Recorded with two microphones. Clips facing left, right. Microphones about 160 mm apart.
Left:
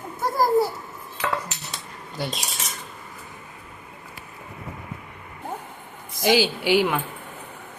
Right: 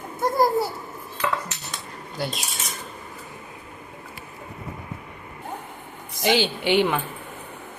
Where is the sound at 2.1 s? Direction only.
Centre (ahead or behind).